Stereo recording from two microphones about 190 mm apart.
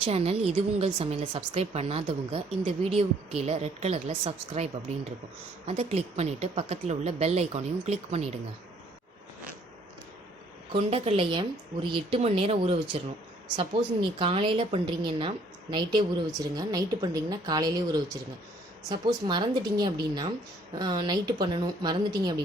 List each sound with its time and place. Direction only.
0.0 s a woman's voice: 30° right (ahead or behind)
10.7 s a woman's voice: 30° right (ahead or behind)
14.2 s a woman's voice: 25° right (ahead or behind)